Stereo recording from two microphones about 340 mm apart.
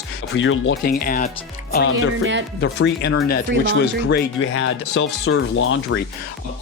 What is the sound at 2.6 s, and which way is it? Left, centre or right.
Speech, left.